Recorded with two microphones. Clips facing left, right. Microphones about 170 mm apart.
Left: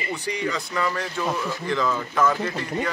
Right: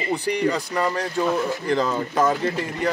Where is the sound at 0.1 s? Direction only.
35° right (ahead or behind).